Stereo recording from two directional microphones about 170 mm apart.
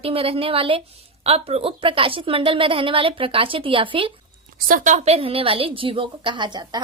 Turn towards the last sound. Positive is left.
turn(degrees=-25)  # may be behind; listen again after turning